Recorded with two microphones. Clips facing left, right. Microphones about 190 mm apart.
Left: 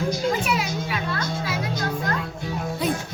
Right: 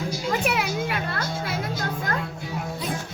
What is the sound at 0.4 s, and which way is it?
Children playing, 60° right (ahead or behind).